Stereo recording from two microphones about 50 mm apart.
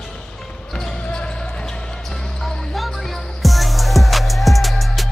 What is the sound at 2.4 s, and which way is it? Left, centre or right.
Basketball bounce, centre.